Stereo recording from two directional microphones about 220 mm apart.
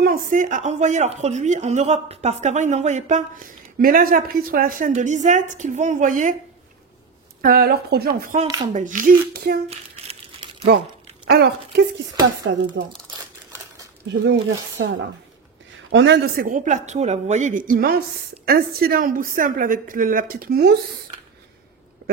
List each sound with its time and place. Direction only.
0.0 s speech: 40° right (ahead or behind)
7.4 s speech: 45° right (ahead or behind)
9.7 s crumpling: 25° right (ahead or behind)
11.2 s speech: 50° right (ahead or behind)
12.5 s speech: 60° right (ahead or behind)
14.0 s speech: 55° right (ahead or behind)
15.9 s speech: 55° right (ahead or behind)